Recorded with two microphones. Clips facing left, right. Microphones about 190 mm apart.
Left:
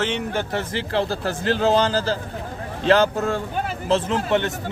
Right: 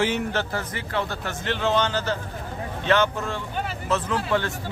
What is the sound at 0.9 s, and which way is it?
Speech, 35° left (ahead or behind).